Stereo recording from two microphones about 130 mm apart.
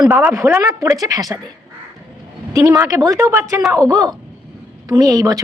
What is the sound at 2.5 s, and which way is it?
A woman's voice, 25° right (ahead or behind).